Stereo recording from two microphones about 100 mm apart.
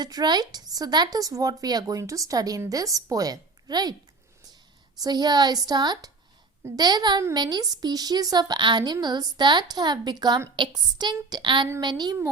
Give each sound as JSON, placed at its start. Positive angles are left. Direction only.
{"t": 0.0, "sound": "a woman's voice", "side_deg": -45}
{"t": 4.9, "sound": "a woman's voice", "side_deg": -45}